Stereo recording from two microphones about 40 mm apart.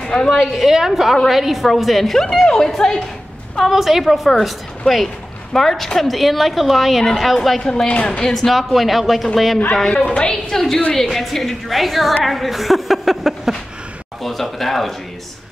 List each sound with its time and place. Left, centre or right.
0.0 s a woman's voice: centre
0.5 s a woman's voice: centre
2.4 s speech: centre
3.6 s a woman's voice: centre
7.6 s speech: centre
8.5 s a woman's voice: centre
9.9 s a woman's voice: left
10.5 s a woman's voice: centre